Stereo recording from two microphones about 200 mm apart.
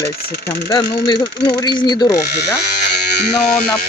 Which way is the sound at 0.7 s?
20° left (ahead or behind).